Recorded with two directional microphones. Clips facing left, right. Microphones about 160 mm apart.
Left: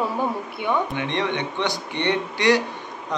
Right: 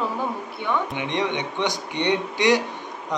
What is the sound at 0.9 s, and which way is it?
A man's voice, 15° right (ahead or behind).